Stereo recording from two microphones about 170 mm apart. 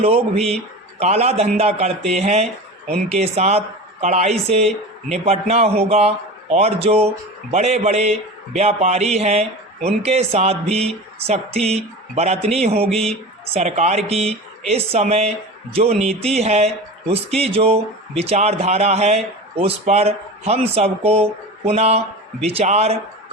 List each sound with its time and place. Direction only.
0.0 s speech: 35° right (ahead or behind)
12.9 s speech: 5° left (ahead or behind)
13.5 s speech: 40° right (ahead or behind)